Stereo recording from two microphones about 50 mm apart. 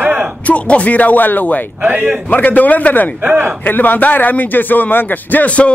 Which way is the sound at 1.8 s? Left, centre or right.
Right.